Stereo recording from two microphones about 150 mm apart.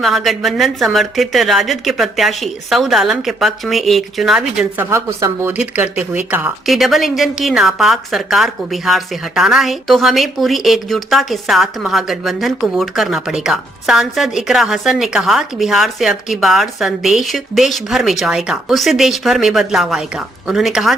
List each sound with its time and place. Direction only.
0.0 s a woman's voice: centre (ahead or behind)
4.9 s speech: 20° right (ahead or behind)
5.5 s speech: 10° right (ahead or behind)
6.7 s a woman's voice: centre (ahead or behind)